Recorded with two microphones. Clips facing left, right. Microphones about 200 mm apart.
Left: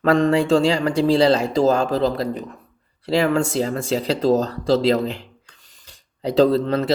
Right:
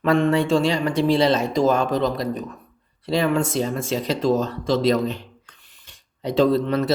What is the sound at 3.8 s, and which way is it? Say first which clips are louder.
Speech: left 2 dB; 35° left (ahead or behind).